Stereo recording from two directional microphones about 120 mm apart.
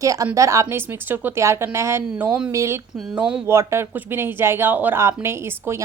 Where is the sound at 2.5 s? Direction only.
25° right (ahead or behind).